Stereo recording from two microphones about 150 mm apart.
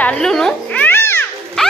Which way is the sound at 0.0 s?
5° left (ahead or behind).